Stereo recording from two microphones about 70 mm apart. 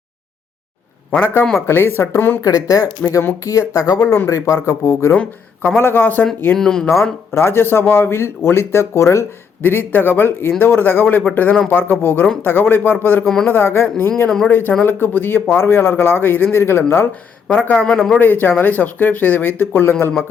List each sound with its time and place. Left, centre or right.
1.2 s speech: left
2.4 s speech: left
4.3 s speech: left
5.1 s speech: centre
5.7 s speech: left
6.6 s speech: centre
7.3 s speech: left
9.6 s speech: left
13.2 s speech: centre
13.5 s speech: left
14.3 s speech: centre
14.8 s speech: left
17.7 s speech: centre
18.2 s speech: left